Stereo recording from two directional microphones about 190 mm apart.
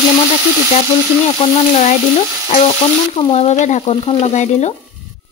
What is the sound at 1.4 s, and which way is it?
Speech, 35° left (ahead or behind).